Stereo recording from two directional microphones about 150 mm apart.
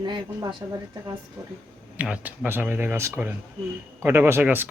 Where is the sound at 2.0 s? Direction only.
10° right (ahead or behind).